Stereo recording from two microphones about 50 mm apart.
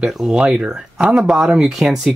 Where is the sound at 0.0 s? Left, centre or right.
Centre.